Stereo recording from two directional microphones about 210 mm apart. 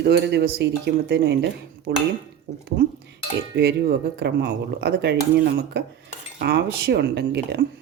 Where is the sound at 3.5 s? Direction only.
50° right (ahead or behind).